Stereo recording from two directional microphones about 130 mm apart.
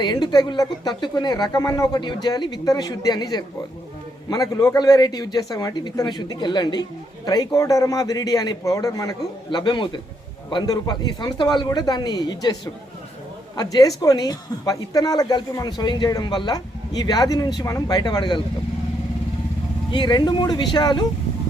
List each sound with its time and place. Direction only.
0.0 s a man's voice: 35° left (ahead or behind)
13.6 s a man's voice: 30° left (ahead or behind)
19.9 s speech: 35° left (ahead or behind)